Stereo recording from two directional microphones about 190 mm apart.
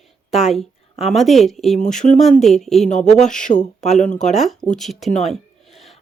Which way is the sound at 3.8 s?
40° left (ahead or behind).